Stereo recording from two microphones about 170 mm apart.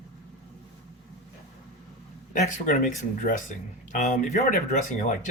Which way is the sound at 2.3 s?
50° left (ahead or behind).